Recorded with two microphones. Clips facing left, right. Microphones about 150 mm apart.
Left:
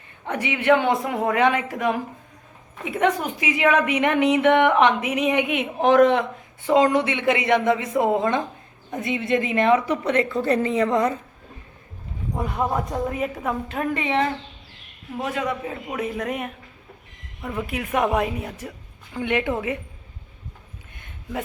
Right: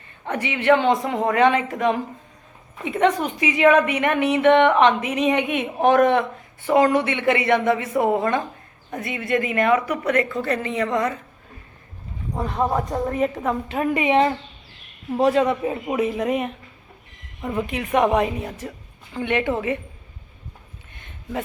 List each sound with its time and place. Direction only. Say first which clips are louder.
0.3 s a woman's voice: right 1 dB; 15° left (ahead or behind); by 11.2 s 30° left (ahead or behind)
12.4 s a woman's voice: right 2 dB; centre (ahead or behind); by 14.3 s 15° right (ahead or behind)
15.2 s a man's voice: right 8 dB; 35° right (ahead or behind)
16.0 s a woman's voice: right 4 dB; 5° right (ahead or behind)
17.4 s speech: right 4 dB; 15° right (ahead or behind)
17.7 s a woman's voice: right 3 dB; 5° left (ahead or behind)